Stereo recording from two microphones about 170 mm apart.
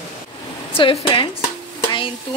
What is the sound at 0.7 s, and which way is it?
Speech, 30° left (ahead or behind).